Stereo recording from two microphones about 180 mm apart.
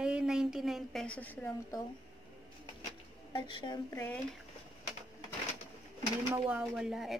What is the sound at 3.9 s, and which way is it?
Speech, 10° left (ahead or behind).